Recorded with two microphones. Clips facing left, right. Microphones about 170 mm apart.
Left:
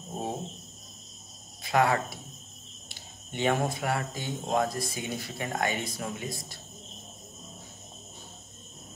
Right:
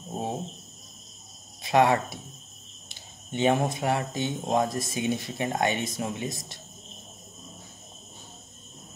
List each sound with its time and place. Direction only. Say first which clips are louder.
1.6 s cricket: right 4 dB; 25° right (ahead or behind)
2.9 s speech: right 6 dB; 20° right (ahead or behind)